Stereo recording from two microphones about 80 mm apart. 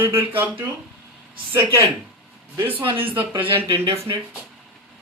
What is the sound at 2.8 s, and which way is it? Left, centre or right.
Speech, right.